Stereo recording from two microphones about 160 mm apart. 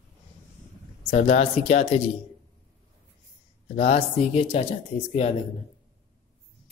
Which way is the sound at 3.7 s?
40° left (ahead or behind).